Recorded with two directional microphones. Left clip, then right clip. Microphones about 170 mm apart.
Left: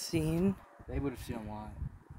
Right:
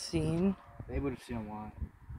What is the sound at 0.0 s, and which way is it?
Speech, 30° left (ahead or behind).